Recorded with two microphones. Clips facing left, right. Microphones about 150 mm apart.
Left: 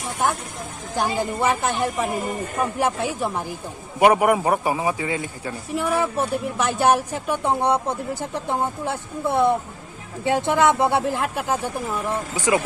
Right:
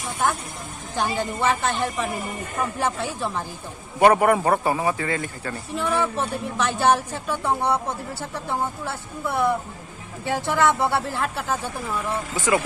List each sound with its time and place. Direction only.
0.9 s a man's voice: 10° left (ahead or behind)